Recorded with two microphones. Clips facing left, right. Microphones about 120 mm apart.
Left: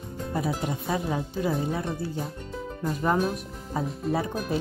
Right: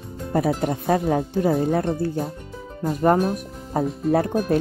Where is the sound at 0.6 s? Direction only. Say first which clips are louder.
Right 7 dB; 55° right (ahead or behind).